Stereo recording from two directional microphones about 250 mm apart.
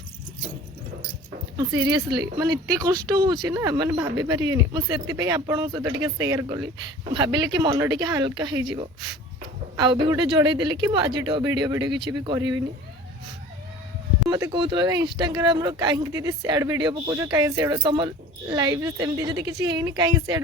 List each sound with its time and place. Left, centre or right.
1.5 s speech: centre
9.7 s speech: centre
14.3 s speech: centre